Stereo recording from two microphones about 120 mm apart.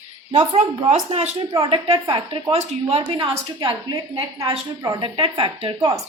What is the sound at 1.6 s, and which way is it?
Speech, 45° right (ahead or behind).